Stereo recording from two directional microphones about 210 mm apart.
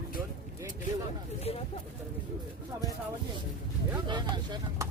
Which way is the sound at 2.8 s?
20° left (ahead or behind).